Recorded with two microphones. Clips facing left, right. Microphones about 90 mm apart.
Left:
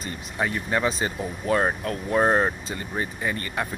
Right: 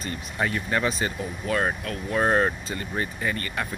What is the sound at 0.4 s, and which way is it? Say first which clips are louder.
Speech: left 1 dB; 15° left (ahead or behind).